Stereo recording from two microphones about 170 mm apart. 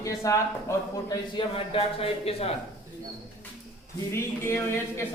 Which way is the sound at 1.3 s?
30° left (ahead or behind).